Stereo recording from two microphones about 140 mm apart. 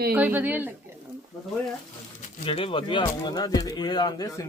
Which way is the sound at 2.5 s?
40° left (ahead or behind).